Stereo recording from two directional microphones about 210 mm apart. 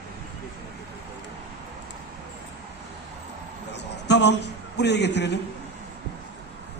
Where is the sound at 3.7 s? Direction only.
55° left (ahead or behind).